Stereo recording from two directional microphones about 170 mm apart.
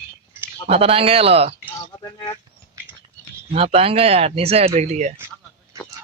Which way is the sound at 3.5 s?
35° right (ahead or behind).